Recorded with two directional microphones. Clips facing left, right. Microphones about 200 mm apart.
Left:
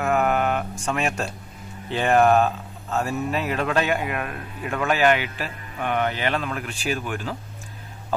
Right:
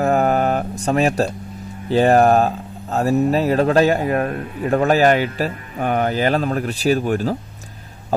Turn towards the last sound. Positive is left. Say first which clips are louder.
# right 10 dB
turn(degrees=-40)  # may be behind; listen again after turning